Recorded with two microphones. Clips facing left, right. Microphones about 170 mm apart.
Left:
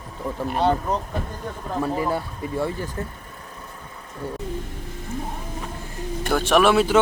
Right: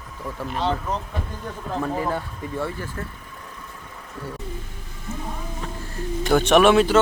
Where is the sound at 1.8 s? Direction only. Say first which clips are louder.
Left 2 dB; 10° left (ahead or behind).